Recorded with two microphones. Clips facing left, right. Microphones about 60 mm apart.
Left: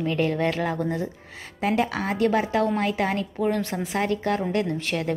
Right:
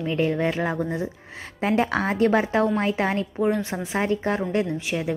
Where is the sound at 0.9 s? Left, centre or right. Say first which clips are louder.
Right 1 dB; right.